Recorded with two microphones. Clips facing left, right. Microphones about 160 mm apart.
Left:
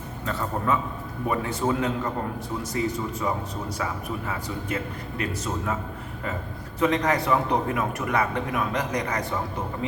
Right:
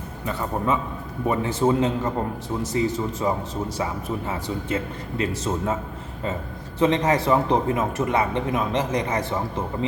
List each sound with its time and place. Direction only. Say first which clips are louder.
0.3 s a man's voice: right 2 dB; 20° right (ahead or behind)
6.7 s a man's voice: right 3 dB; 25° right (ahead or behind)